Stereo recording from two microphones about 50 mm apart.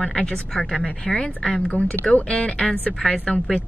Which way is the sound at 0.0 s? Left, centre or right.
Centre.